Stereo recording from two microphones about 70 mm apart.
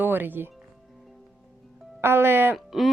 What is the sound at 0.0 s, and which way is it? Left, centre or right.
Speech, right.